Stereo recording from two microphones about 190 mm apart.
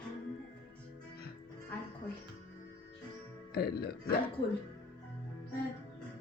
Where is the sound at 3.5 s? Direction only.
55° left (ahead or behind).